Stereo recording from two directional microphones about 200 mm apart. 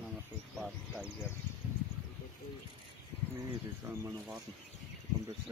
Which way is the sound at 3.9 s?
Centre (ahead or behind).